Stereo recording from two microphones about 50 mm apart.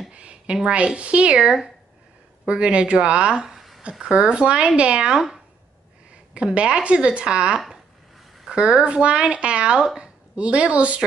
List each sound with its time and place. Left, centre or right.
0.1 s a sound: right
0.7 s a woman's voice: right
2.4 s a woman's voice: right
3.4 s a sound: centre
4.0 s a woman's voice: centre
6.3 s a woman's voice: right